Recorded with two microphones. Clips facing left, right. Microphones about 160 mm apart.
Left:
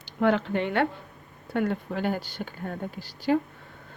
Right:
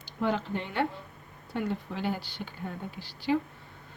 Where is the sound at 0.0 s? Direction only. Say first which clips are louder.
Left 6 dB; 65° left (ahead or behind); by 3.4 s 45° left (ahead or behind).